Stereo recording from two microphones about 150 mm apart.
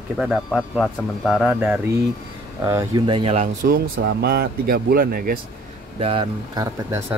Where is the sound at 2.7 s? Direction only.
20° right (ahead or behind).